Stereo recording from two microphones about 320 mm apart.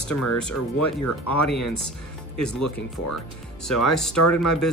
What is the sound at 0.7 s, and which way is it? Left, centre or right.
Speech, left.